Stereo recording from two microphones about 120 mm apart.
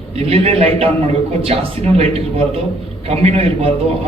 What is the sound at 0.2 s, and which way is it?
A man's voice, 55° right (ahead or behind).